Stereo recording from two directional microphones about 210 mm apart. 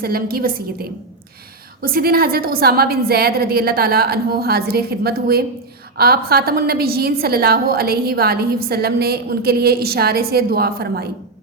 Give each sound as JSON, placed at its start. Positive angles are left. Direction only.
{"t": 0.0, "sound": "a woman's voice", "side_deg": -45}